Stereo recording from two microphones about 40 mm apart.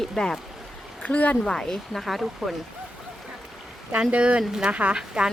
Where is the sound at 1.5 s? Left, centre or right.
Centre.